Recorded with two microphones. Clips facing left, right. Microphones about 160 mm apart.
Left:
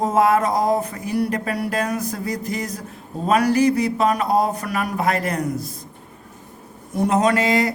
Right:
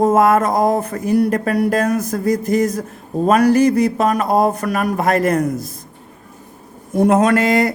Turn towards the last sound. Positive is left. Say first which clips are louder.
# right 4 dB
turn(degrees=-50)  # may be behind; listen again after turning